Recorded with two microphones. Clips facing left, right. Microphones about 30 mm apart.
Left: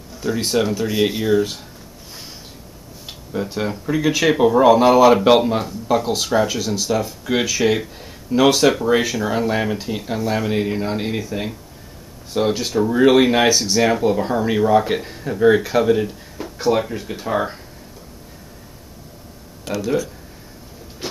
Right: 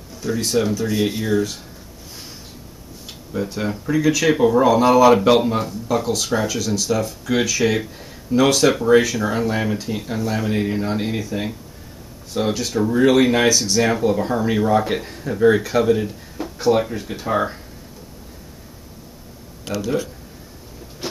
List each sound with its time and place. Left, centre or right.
0.4 s speech: left
3.1 s speech: centre